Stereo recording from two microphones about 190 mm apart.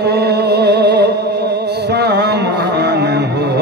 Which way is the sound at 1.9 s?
60° right (ahead or behind).